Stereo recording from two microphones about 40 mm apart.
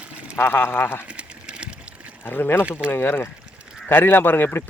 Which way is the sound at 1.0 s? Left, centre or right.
Right.